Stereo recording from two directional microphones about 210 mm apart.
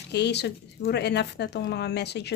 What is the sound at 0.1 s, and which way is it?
Speech, 50° left (ahead or behind).